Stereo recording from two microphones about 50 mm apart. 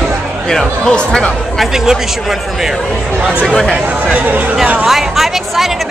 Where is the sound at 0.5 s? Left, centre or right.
Centre.